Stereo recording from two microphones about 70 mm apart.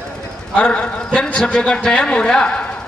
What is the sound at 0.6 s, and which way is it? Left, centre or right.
A man's voice, centre.